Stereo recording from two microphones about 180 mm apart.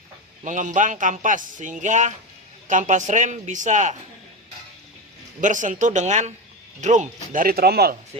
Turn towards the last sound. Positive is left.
turn(degrees=-60)  # may be behind; listen again after turning